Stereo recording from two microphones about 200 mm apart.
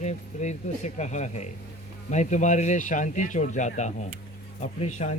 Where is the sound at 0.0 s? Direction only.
35° left (ahead or behind).